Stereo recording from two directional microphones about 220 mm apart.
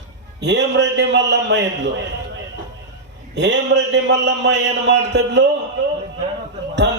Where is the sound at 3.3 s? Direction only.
55° right (ahead or behind).